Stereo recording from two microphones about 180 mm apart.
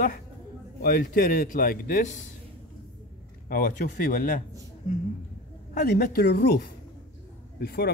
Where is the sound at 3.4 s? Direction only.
55° left (ahead or behind).